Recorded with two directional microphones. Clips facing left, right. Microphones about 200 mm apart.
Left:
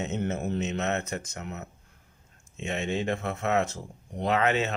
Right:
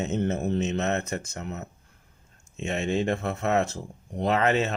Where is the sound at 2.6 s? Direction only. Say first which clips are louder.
Right 3 dB; 45° right (ahead or behind).